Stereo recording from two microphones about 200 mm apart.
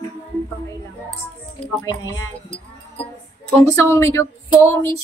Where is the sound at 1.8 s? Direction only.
15° left (ahead or behind).